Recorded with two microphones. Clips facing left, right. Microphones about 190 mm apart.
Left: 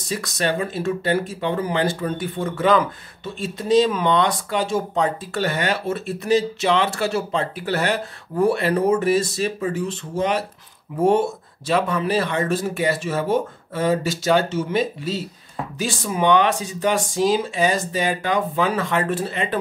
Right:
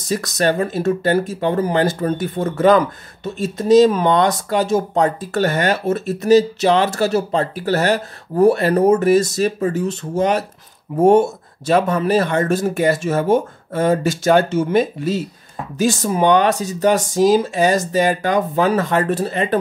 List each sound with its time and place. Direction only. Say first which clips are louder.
0.1 s speech: right 5 dB; 45° right (ahead or behind)